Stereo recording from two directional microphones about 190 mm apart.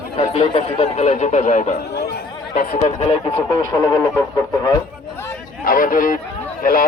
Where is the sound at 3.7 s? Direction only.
20° left (ahead or behind).